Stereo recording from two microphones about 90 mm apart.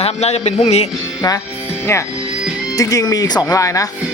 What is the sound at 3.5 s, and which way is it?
Speech, 35° left (ahead or behind).